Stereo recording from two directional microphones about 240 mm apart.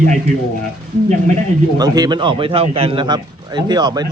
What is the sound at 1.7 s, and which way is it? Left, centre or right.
A man's voice, centre.